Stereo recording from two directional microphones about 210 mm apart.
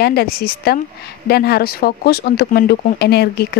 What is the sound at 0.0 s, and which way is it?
A woman's voice, 50° left (ahead or behind).